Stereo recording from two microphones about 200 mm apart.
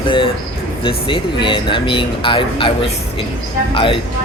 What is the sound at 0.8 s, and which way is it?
Speech, 25° left (ahead or behind).